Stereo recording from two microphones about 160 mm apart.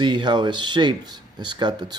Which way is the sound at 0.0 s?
30° right (ahead or behind).